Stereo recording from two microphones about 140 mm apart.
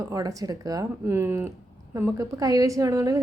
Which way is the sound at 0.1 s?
25° right (ahead or behind).